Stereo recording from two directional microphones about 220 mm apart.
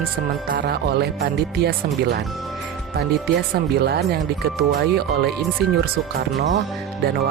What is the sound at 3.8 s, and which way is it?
Speech, 45° right (ahead or behind).